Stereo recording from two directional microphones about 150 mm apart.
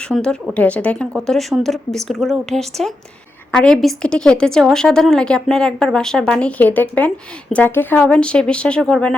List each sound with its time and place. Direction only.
0.1 s a woman's voice: 5° left (ahead or behind)